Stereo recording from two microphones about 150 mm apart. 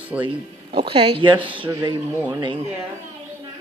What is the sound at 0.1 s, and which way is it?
Speech, 10° right (ahead or behind).